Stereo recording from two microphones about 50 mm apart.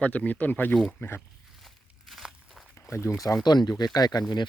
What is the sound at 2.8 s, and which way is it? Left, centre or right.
Speech, left.